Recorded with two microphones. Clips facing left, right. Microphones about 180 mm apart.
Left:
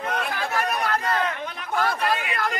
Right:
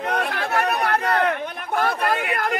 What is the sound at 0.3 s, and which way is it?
Chatter, 65° right (ahead or behind).